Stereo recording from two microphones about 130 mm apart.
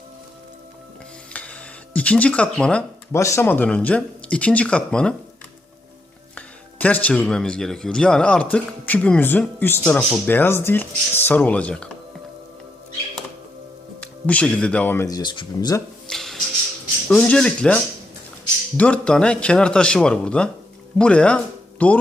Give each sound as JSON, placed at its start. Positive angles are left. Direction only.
{"t": 1.3, "sound": "music", "side_deg": 10}
{"t": 3.1, "sound": "speech", "side_deg": 20}
{"t": 6.3, "sound": "speech", "side_deg": 10}
{"t": 14.0, "sound": "speech", "side_deg": 10}
{"t": 15.0, "sound": "speech", "side_deg": 30}
{"t": 16.0, "sound": "a sound", "side_deg": 5}
{"t": 17.1, "sound": "speech", "side_deg": 5}